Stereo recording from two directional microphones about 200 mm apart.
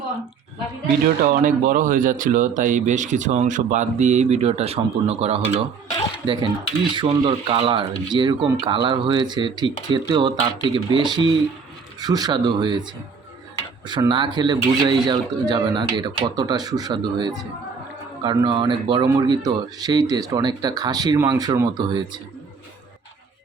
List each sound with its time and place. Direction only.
1.3 s speech: 40° right (ahead or behind); by 12.8 s 20° right (ahead or behind)
13.8 s speech: 20° right (ahead or behind)